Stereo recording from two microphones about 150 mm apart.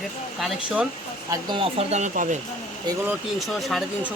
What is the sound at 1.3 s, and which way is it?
Speech, 30° right (ahead or behind).